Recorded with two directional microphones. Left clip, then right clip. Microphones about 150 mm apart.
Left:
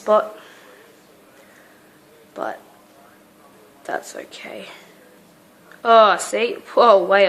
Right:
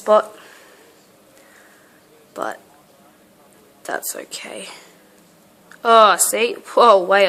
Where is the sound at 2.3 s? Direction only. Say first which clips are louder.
Right 1 dB; 30° right (ahead or behind).